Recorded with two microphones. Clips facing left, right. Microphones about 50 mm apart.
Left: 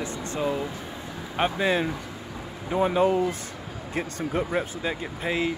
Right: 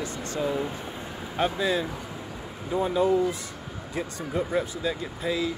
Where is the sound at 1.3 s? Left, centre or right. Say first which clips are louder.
Left 2 dB; left.